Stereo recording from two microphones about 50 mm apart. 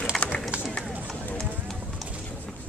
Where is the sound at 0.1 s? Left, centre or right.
Centre.